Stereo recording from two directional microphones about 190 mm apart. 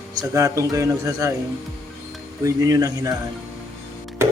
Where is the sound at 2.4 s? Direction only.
15° right (ahead or behind).